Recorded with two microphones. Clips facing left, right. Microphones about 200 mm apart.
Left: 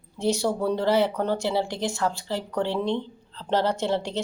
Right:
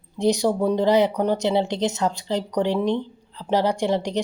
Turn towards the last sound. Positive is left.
turn(degrees=-15)  # may be behind; listen again after turning